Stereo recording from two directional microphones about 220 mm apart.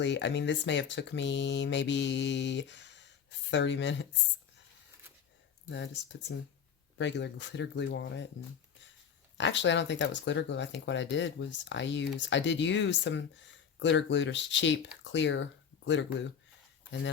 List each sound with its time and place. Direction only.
0.0 s speech: 55° left (ahead or behind)
5.7 s speech: 55° left (ahead or behind)
9.4 s speech: 55° left (ahead or behind)